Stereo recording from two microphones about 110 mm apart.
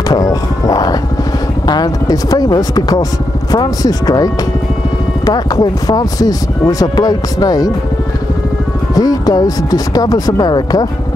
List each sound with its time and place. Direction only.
0.1 s a sound: 35° left (ahead or behind)
1.7 s speech: 35° left (ahead or behind)
8.9 s speech: 35° left (ahead or behind)